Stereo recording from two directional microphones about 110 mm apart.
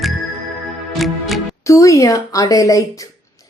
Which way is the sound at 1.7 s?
30° left (ahead or behind).